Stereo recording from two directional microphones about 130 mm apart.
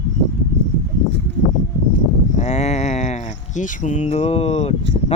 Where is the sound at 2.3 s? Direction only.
60° left (ahead or behind).